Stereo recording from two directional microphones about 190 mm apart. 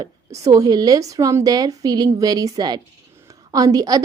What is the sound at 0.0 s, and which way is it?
Speech, 20° right (ahead or behind).